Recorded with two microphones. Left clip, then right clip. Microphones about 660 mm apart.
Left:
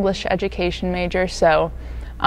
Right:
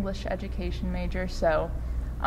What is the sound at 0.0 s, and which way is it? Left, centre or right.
A woman's voice, left.